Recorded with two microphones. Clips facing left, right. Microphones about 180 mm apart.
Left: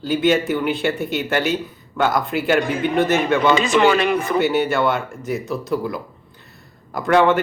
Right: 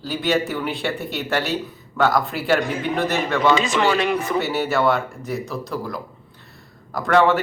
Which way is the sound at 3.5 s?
60° left (ahead or behind).